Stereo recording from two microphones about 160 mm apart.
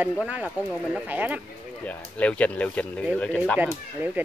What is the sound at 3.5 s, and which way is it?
Speech, 10° right (ahead or behind).